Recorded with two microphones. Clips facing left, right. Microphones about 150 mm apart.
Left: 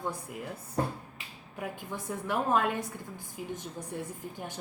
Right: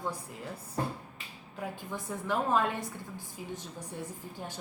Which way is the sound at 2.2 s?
10° left (ahead or behind).